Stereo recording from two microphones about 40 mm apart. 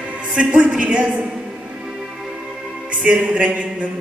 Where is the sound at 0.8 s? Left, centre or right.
Right.